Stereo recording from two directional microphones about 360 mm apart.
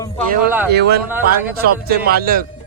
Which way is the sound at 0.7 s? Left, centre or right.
Right.